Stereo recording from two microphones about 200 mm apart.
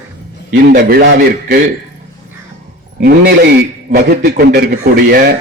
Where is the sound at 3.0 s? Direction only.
55° right (ahead or behind).